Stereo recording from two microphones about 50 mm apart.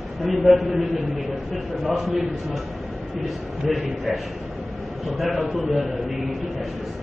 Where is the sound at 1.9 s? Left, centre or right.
Centre.